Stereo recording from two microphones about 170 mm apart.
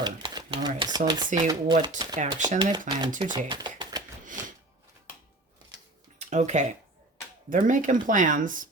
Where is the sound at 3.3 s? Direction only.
25° right (ahead or behind).